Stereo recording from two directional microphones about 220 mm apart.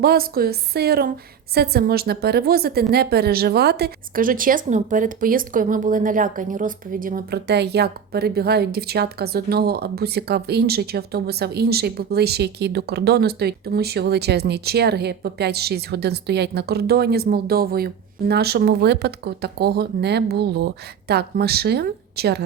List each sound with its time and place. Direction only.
0.0 s a woman's voice: 45° right (ahead or behind)